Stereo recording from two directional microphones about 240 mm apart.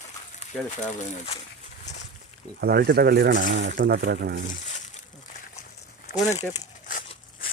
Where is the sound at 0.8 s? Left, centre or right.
Left.